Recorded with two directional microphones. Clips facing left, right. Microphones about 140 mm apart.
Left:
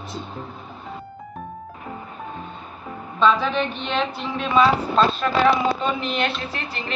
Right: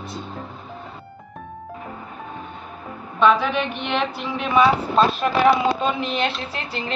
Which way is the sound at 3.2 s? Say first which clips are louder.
Right 1 dB; 15° right (ahead or behind).